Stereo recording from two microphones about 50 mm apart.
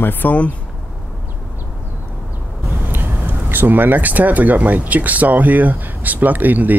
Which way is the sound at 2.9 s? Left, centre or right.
Right.